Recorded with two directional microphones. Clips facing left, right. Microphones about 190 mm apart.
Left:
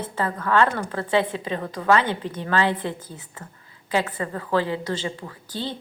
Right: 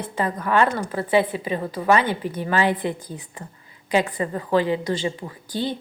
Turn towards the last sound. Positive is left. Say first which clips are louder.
# right 4 dB
turn(degrees=-15)  # may be behind; listen again after turning